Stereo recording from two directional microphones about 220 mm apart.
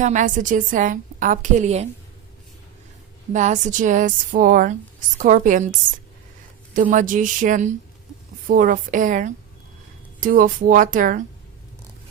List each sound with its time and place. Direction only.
0.0 s speech: 35° right (ahead or behind)
3.3 s speech: 35° right (ahead or behind)
6.9 s speech: 35° right (ahead or behind)